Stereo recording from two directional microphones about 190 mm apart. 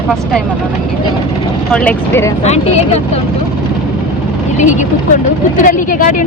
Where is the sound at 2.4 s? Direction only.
35° left (ahead or behind).